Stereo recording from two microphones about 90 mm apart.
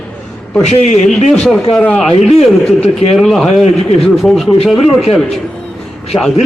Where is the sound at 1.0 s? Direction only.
5° left (ahead or behind).